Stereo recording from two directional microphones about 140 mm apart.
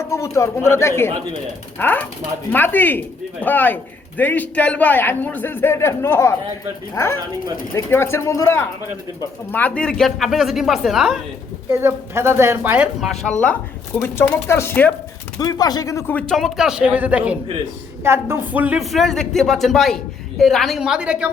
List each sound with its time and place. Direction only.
0.0 s a man's voice: 20° left (ahead or behind); by 11.2 s 5° right (ahead or behind)
11.7 s a woman's voice: 20° right (ahead or behind)
13.0 s speech: 5° left (ahead or behind)
13.4 s a man's voice: 15° left (ahead or behind)
15.4 s speech: 30° left (ahead or behind)
16.1 s a woman's voice: 5° left (ahead or behind); by 18.8 s 10° right (ahead or behind)
18.8 s speech: centre (ahead or behind)